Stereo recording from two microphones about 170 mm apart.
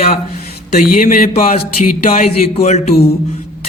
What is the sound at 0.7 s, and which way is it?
A man's voice, 55° left (ahead or behind).